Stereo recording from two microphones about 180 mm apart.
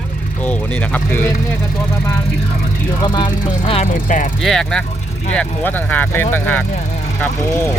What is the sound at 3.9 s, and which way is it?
Speech, 50° left (ahead or behind).